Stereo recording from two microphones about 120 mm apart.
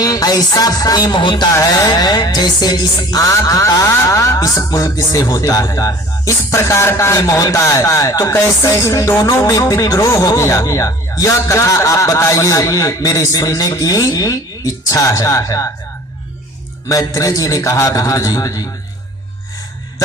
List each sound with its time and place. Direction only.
0.0 s music: 30° left (ahead or behind)
1.5 s music: 30° left (ahead or behind)
16.9 s music: 30° left (ahead or behind)